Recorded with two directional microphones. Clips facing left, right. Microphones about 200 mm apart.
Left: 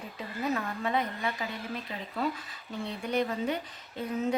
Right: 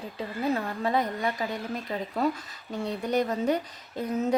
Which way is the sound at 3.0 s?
40° right (ahead or behind).